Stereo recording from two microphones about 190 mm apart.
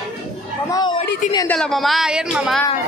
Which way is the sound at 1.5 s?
Centre (ahead or behind).